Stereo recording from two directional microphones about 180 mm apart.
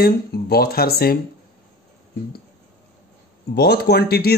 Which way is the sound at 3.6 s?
60° left (ahead or behind).